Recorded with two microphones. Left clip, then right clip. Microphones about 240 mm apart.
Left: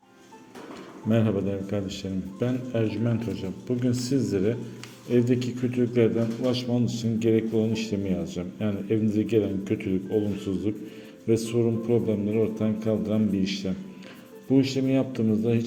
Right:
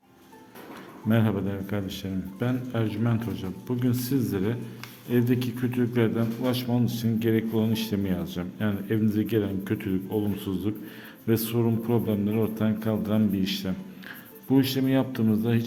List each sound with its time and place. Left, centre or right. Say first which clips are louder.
1.1 s a man's voice: left 2 dB; centre